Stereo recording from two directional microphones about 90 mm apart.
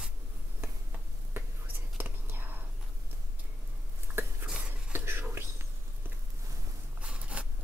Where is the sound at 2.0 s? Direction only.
25° right (ahead or behind).